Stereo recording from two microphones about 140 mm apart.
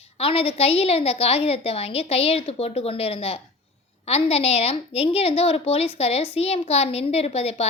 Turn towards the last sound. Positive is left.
turn(degrees=45)  # may be behind; listen again after turning